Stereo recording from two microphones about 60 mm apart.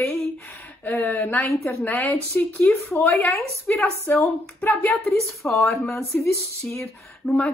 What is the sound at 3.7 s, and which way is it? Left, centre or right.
Speech, left.